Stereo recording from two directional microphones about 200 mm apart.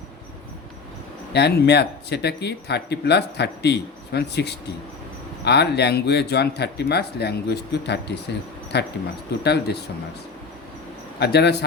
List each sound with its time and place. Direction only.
1.3 s speech: 55° left (ahead or behind)
11.2 s speech: 55° left (ahead or behind)